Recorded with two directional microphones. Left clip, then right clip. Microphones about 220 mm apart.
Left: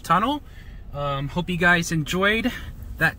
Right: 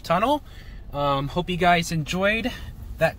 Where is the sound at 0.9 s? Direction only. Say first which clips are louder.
Right 4 dB; 35° right (ahead or behind).